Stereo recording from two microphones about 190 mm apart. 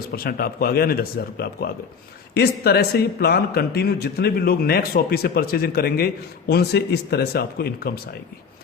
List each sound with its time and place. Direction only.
0.1 s speech: 50° left (ahead or behind)